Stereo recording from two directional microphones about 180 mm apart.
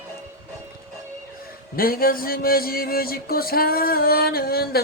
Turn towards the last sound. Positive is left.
turn(degrees=60)  # may be behind; listen again after turning